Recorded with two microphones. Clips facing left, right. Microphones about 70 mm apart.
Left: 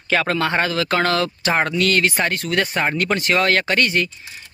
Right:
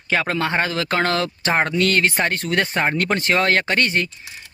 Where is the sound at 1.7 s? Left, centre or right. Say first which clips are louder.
Even; right.